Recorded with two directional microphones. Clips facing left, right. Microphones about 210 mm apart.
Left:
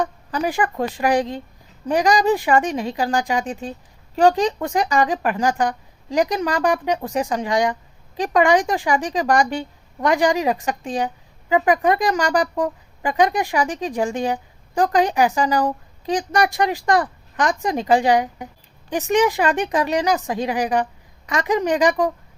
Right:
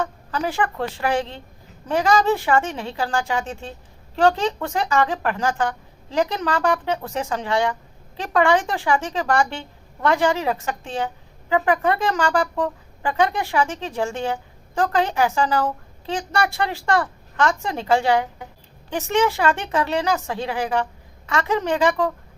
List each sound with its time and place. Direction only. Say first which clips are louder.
0.0 s a woman's voice: left 2 dB; 15° left (ahead or behind)